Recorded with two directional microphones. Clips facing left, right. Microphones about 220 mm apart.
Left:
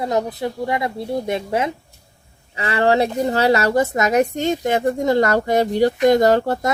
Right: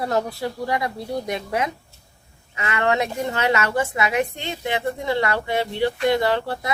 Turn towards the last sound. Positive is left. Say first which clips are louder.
# left 7 dB
turn(degrees=45)  # may be behind; listen again after turning